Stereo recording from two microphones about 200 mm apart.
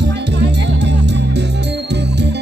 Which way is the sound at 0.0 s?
60° right (ahead or behind).